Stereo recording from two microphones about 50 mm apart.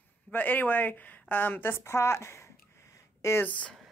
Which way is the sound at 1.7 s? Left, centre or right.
Left.